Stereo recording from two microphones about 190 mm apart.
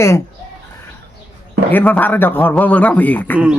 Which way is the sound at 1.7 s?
10° left (ahead or behind).